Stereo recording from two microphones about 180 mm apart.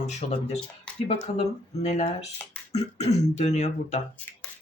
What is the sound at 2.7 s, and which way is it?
Speech, 35° left (ahead or behind).